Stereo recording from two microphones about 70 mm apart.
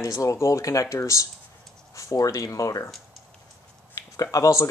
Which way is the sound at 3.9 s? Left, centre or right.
Left.